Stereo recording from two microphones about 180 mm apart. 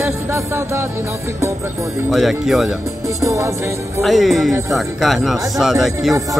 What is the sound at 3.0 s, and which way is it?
Music, 15° right (ahead or behind).